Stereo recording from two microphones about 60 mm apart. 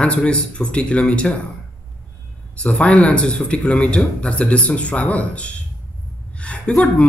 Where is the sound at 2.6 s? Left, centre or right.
Centre.